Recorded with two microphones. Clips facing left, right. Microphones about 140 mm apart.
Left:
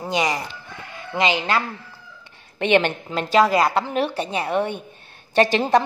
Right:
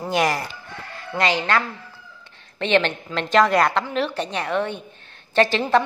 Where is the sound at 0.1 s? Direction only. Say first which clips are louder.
Right 1 dB; 5° right (ahead or behind).